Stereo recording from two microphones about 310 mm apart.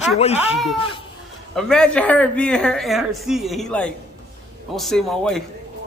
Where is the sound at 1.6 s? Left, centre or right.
Centre.